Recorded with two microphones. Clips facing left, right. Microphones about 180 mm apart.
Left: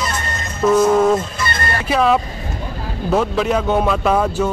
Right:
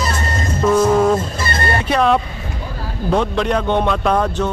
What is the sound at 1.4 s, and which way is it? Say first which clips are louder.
Vehicle: right 2 dB; 30° right (ahead or behind).